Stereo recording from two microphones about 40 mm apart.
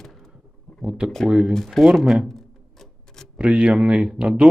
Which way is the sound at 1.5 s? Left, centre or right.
Centre.